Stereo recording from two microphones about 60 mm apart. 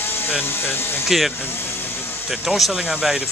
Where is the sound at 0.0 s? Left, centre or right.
Left.